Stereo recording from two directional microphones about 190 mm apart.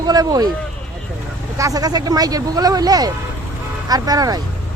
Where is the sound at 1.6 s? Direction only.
20° right (ahead or behind).